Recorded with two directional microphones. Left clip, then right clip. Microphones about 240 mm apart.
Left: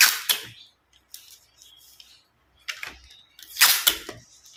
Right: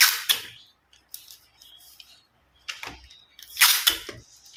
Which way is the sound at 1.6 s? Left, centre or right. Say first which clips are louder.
Right 2 dB; centre.